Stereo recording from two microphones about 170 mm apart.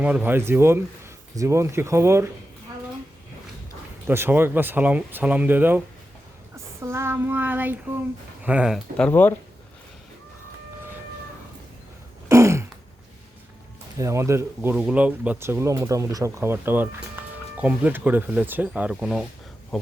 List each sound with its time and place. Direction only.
0.0 s speech: 10° right (ahead or behind)
4.0 s speech: 15° right (ahead or behind)
6.8 s speech: 15° right (ahead or behind)
9.0 s speech: 10° left (ahead or behind)
12.3 s throat clearing: 15° right (ahead or behind)
14.0 s speech: 15° right (ahead or behind)